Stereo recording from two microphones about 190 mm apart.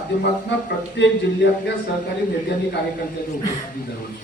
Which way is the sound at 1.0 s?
65° left (ahead or behind).